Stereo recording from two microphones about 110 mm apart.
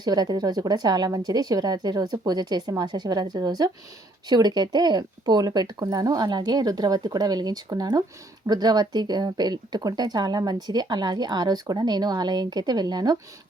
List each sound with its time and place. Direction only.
0.0 s speech: 40° right (ahead or behind)